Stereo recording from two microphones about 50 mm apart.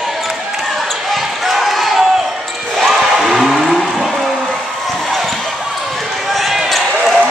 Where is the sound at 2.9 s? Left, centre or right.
Centre.